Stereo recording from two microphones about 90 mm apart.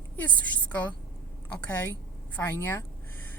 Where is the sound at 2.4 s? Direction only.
25° left (ahead or behind).